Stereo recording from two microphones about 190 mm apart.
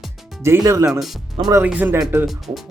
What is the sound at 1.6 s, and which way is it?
Speech, 10° right (ahead or behind).